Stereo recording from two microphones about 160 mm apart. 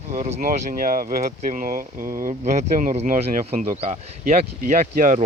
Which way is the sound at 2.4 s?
45° right (ahead or behind).